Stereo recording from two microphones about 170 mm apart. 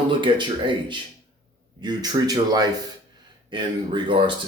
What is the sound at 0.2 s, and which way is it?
Speech, 30° right (ahead or behind).